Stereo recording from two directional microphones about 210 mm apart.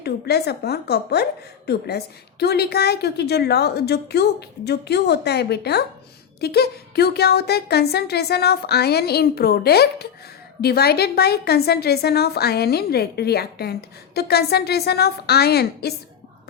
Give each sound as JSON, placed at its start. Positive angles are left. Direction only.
{"t": 0.0, "sound": "a woman's voice", "side_deg": 50}